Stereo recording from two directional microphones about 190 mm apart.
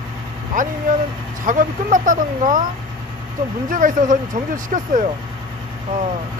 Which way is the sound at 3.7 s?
45° right (ahead or behind).